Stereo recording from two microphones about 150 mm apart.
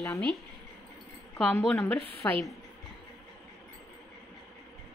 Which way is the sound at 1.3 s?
5° left (ahead or behind).